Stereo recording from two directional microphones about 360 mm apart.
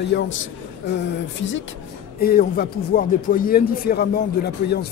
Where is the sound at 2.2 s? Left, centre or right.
Left.